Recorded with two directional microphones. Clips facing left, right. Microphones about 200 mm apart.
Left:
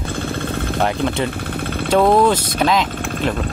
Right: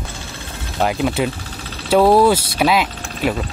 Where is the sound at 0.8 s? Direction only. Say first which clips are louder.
Right 3 dB; 5° right (ahead or behind).